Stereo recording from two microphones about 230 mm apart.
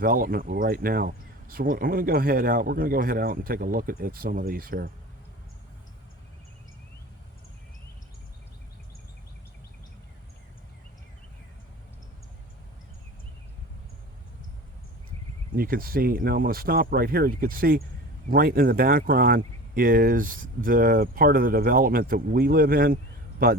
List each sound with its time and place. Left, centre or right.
0.0 s speech: right
15.5 s speech: right